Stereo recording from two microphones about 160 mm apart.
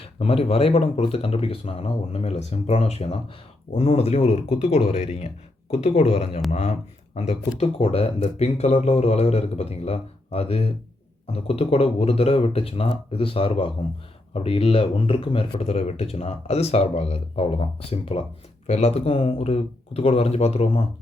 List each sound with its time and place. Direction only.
0.2 s speech: 35° left (ahead or behind)